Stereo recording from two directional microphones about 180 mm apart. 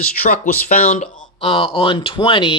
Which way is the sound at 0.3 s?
50° left (ahead or behind).